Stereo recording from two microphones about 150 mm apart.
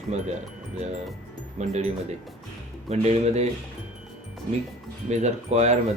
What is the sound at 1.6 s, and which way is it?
Speech, 50° right (ahead or behind).